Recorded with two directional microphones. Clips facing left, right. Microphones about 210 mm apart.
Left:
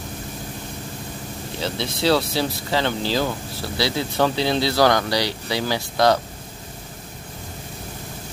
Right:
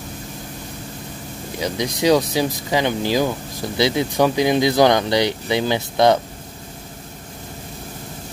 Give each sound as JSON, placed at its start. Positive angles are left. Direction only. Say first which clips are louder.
{"t": 1.6, "sound": "speech", "louder": "right 3 dB", "side_deg": -15}